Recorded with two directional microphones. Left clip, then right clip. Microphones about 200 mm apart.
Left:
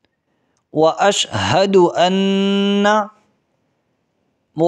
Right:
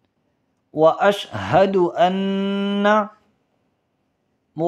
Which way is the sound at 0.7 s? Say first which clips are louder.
Left 1 dB; 40° left (ahead or behind).